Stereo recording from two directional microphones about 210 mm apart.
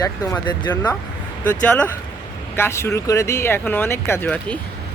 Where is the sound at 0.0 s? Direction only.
20° left (ahead or behind).